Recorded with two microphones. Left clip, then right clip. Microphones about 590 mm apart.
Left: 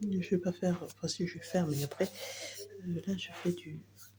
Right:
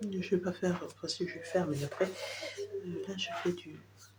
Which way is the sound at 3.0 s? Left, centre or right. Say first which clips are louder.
Right 2 dB; left.